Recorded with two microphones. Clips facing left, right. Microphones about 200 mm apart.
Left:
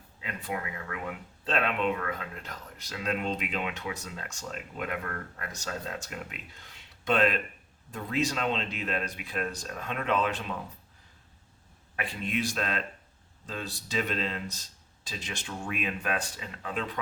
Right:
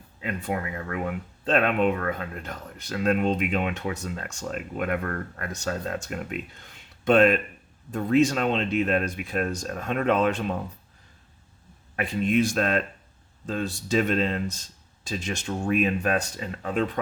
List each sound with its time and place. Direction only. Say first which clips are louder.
0.2 s speech: right 6 dB; 50° right (ahead or behind)
11.9 s speech: right 9 dB; 45° right (ahead or behind)